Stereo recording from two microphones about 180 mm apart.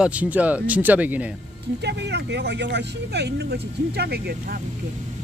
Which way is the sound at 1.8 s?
70° right (ahead or behind).